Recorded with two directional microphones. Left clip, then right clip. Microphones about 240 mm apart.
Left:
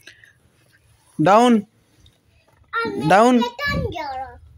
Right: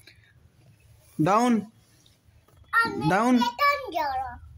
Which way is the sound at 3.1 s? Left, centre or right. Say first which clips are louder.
Left 11 dB; centre.